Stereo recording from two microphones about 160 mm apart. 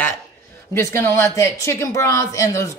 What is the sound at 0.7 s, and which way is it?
Speech, 15° left (ahead or behind).